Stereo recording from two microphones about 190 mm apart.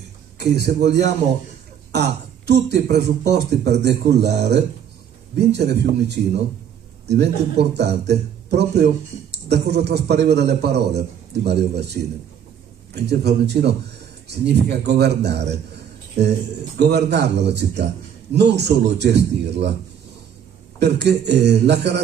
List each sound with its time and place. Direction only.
0.4 s a man's voice: 60° right (ahead or behind)
13.1 s a man's voice: 60° right (ahead or behind)
17.5 s a man's voice: 60° right (ahead or behind)
20.8 s a man's voice: 60° right (ahead or behind)